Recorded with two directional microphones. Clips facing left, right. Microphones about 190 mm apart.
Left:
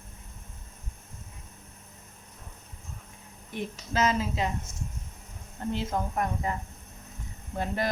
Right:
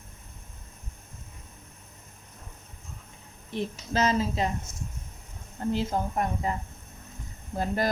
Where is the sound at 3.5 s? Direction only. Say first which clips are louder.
Right 3 dB; 35° right (ahead or behind).